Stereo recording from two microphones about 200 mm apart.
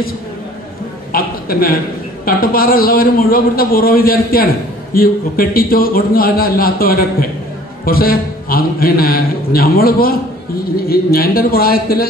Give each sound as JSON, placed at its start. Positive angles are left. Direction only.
{"t": 1.1, "sound": "a man's voice", "side_deg": 45}